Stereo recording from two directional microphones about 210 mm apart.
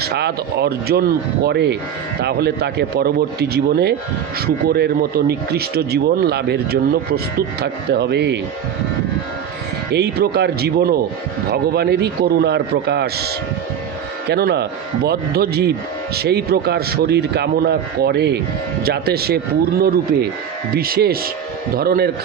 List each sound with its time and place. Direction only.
0.0 s speech: 50° right (ahead or behind)
9.9 s speech: 50° right (ahead or behind)
20.7 s speech: 45° right (ahead or behind)